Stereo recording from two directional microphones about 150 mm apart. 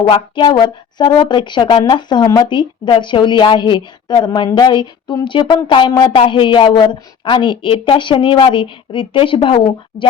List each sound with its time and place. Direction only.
0.0 s a woman's voice: 30° left (ahead or behind)